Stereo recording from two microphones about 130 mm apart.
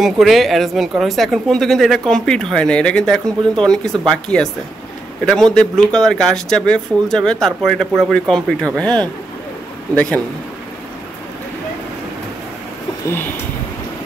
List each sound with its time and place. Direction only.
0.0 s a woman's voice: centre (ahead or behind)
13.0 s speech: 15° left (ahead or behind)